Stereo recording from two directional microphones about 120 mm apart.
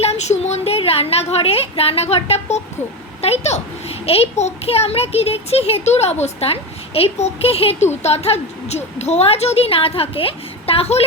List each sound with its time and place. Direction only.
0.0 s a woman's voice: 65° left (ahead or behind)